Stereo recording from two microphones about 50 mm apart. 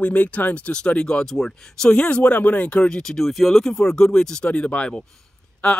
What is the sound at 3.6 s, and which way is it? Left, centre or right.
Speech, centre.